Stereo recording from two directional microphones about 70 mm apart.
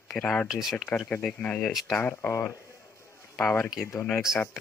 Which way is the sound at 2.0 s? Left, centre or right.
Left.